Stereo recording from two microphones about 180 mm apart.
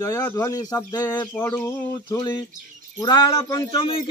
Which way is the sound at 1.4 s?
10° left (ahead or behind).